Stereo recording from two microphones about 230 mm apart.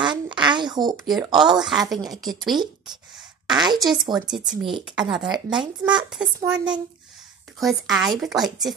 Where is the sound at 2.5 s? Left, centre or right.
Centre.